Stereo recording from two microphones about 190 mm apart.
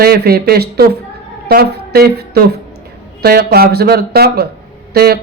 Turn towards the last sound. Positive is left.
turn(degrees=-55)  # may be behind; listen again after turning